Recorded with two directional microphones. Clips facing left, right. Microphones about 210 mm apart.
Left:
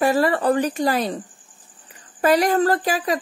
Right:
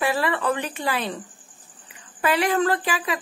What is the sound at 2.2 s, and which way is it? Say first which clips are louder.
Speech: left 4 dB; 40° left (ahead or behind).